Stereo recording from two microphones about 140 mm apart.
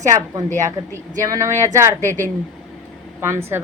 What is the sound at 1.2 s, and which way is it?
Speech, 20° right (ahead or behind).